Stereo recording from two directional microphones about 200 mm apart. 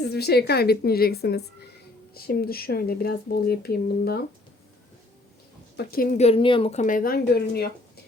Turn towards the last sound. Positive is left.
turn(degrees=50)  # may be behind; listen again after turning